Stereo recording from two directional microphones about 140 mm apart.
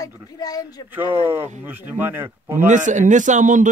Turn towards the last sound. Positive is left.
turn(degrees=-65)  # may be behind; listen again after turning